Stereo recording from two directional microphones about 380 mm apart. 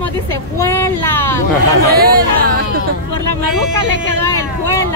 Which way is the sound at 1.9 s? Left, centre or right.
Right.